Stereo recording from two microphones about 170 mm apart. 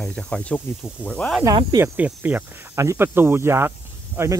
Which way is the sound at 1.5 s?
30° right (ahead or behind).